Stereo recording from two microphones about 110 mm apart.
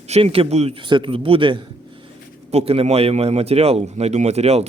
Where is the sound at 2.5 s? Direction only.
65° right (ahead or behind).